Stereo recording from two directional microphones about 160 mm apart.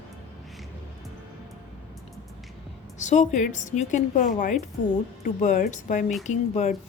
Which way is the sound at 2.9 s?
50° left (ahead or behind).